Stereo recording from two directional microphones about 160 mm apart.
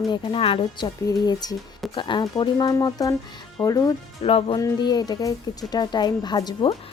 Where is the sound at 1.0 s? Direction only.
25° left (ahead or behind).